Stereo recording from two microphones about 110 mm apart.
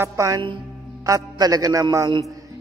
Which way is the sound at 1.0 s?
30° right (ahead or behind).